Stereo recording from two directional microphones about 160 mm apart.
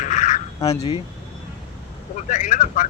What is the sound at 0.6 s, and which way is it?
Speech, 25° left (ahead or behind).